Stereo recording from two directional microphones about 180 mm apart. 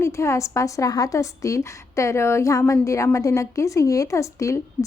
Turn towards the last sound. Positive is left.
turn(degrees=15)  # may be behind; listen again after turning